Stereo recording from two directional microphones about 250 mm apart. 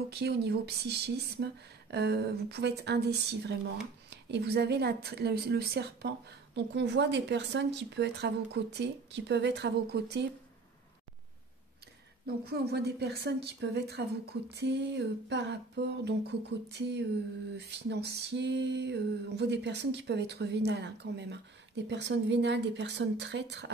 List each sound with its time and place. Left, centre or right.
0.1 s a woman's voice: right
12.3 s a woman's voice: right